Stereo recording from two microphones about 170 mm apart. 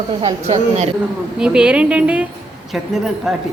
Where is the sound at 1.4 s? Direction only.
5° right (ahead or behind).